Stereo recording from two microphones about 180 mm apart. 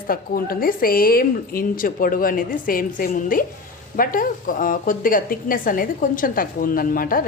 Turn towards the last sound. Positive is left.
turn(degrees=50)  # may be behind; listen again after turning